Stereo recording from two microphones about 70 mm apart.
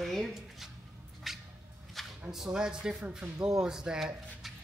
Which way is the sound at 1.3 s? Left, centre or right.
Centre.